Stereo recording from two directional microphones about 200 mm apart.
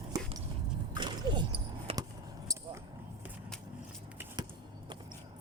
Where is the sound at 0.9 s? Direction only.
20° right (ahead or behind).